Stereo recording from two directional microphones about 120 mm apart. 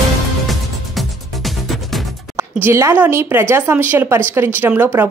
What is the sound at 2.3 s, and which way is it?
Speech, 25° right (ahead or behind).